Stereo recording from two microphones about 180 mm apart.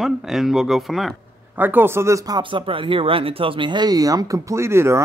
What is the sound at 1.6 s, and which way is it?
Speech, 10° right (ahead or behind).